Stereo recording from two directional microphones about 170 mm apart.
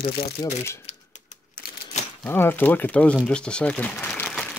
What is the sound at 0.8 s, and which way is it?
Typewriter, 45° left (ahead or behind).